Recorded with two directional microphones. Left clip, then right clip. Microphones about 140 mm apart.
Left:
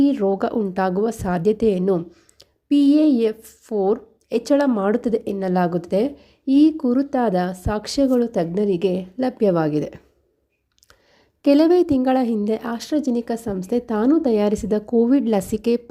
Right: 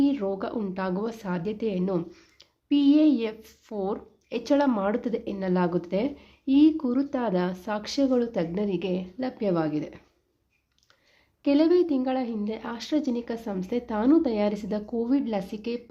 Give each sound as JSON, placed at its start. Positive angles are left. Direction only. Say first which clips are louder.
{"t": 0.0, "sound": "a woman's voice", "louder": "left 7 dB", "side_deg": 40}
{"t": 1.9, "sound": "speech", "louder": "left 8 dB", "side_deg": 25}
{"t": 2.6, "sound": "a woman's voice", "louder": "left 5 dB", "side_deg": 40}
{"t": 11.4, "sound": "a woman's voice", "louder": "left 6 dB", "side_deg": 50}